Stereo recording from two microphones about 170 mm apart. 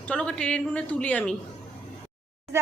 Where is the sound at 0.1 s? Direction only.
5° left (ahead or behind).